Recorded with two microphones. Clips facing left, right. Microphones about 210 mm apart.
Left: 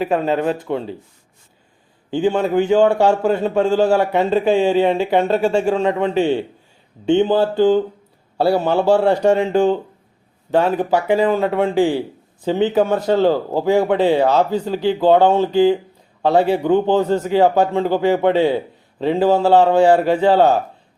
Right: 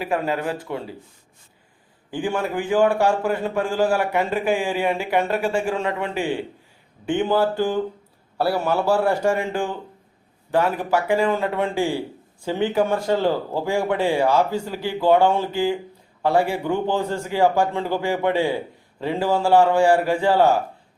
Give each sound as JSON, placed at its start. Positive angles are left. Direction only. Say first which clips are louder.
{"t": 0.0, "sound": "a man's voice", "louder": "left 6 dB", "side_deg": 25}
{"t": 2.0, "sound": "a man's voice", "louder": "left 7 dB", "side_deg": 25}